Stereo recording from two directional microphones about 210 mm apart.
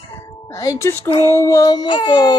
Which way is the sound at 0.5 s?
15° left (ahead or behind).